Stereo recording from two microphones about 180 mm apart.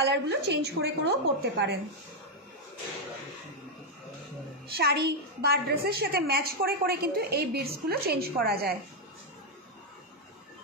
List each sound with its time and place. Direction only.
0.0 s a woman's voice: 65° right (ahead or behind)
4.6 s a woman's voice: 60° right (ahead or behind)